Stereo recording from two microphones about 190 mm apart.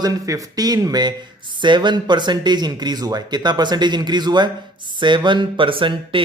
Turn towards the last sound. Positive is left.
turn(degrees=-25)  # may be behind; listen again after turning